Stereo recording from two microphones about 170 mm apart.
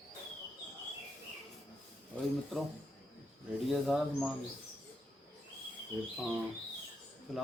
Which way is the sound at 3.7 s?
Centre (ahead or behind).